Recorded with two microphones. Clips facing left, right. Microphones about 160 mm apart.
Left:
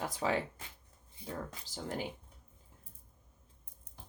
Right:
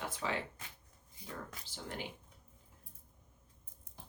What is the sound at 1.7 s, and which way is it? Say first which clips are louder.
Speech: left 6 dB; 40° left (ahead or behind).